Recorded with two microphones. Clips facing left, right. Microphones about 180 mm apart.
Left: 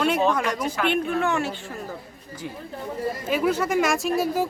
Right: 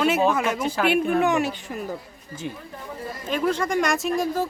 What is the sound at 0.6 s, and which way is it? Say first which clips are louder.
Speech: right 2 dB; 30° right (ahead or behind).